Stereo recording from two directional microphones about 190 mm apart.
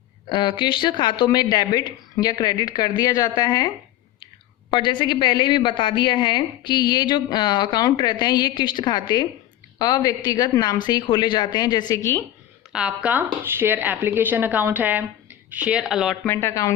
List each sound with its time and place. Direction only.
0.3 s a woman's voice: 25° left (ahead or behind)
4.7 s a woman's voice: 25° left (ahead or behind)
12.7 s speech: 5° right (ahead or behind)
16.2 s speech: 10° left (ahead or behind)